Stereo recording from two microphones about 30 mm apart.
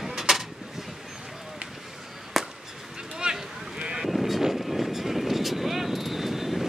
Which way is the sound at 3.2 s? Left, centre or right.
Right.